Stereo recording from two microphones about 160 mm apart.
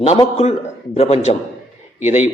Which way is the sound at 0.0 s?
40° left (ahead or behind).